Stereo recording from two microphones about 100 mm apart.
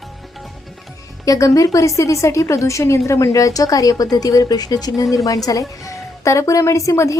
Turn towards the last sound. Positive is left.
turn(degrees=30)  # may be behind; listen again after turning